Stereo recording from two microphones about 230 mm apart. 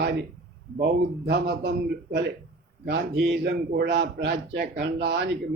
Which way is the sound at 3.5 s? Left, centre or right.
Right.